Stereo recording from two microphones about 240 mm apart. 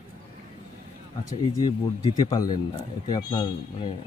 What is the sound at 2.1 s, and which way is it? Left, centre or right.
A man's voice, centre.